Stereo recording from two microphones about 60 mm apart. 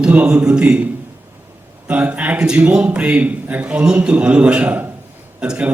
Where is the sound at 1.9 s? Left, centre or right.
Right.